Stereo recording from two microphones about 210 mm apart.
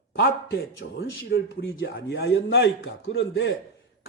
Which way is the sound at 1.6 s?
65° left (ahead or behind).